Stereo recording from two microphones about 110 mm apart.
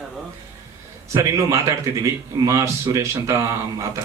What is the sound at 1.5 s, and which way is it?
Speech, 30° right (ahead or behind).